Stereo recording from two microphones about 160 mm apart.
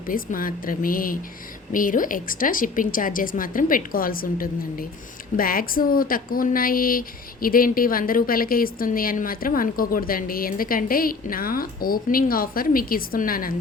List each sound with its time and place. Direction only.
0.1 s a woman's voice: 60° left (ahead or behind)